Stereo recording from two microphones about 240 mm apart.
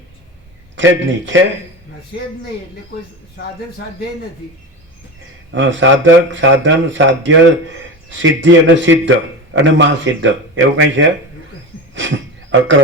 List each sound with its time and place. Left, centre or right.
0.8 s a man's voice: right
5.5 s a man's voice: right
11.9 s a sound: right